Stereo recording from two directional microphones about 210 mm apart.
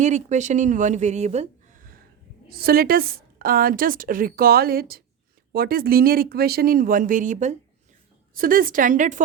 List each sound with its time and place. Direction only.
0.0 s a woman's voice: 35° right (ahead or behind)